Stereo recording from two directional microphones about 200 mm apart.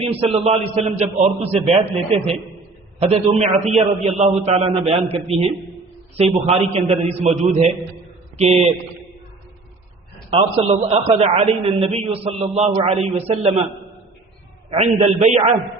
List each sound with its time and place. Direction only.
0.0 s a man's voice: 30° right (ahead or behind)
10.2 s a man's voice: 30° right (ahead or behind)
14.7 s a man's voice: 35° right (ahead or behind)